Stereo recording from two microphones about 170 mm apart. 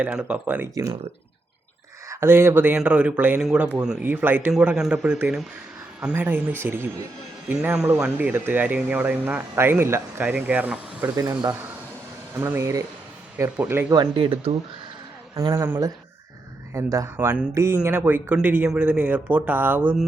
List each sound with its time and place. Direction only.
0.0 s speech: 5° right (ahead or behind)
2.0 s speech: 15° right (ahead or behind)
11.2 s speech: 20° right (ahead or behind)
14.0 s speech: 30° right (ahead or behind)
15.4 s speech: 15° right (ahead or behind)